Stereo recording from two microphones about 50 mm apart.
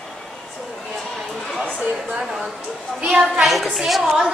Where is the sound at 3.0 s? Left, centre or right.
Centre.